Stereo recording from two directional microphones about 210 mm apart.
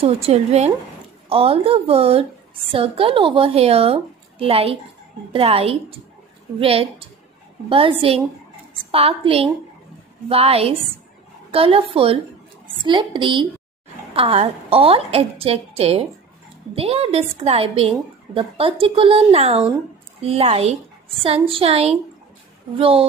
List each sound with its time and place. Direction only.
0.0 s a woman's voice: 30° right (ahead or behind)